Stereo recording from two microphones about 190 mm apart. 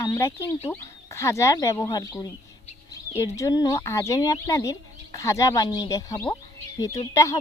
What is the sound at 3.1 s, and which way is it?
Speech, 15° left (ahead or behind).